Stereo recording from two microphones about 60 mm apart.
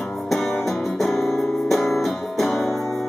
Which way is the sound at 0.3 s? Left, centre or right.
Centre.